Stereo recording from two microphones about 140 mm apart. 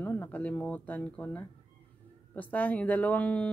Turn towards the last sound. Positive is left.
turn(degrees=10)  # may be behind; listen again after turning